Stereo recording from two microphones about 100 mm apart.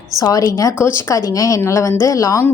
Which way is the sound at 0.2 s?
35° left (ahead or behind).